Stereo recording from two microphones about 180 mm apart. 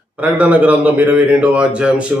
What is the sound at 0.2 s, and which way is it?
A man's voice, 5° right (ahead or behind).